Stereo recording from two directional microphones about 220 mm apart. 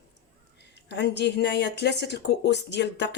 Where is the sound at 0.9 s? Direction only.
50° left (ahead or behind).